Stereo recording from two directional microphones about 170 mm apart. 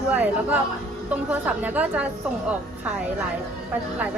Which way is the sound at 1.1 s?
10° right (ahead or behind).